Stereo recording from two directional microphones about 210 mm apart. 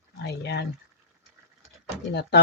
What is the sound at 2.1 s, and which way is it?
Speech, 50° left (ahead or behind).